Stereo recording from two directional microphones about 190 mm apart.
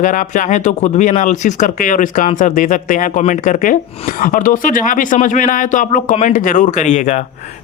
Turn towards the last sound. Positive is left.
turn(degrees=40)  # may be behind; listen again after turning